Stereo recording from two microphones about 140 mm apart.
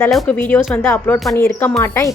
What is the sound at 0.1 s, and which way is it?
A woman's voice, 5° left (ahead or behind).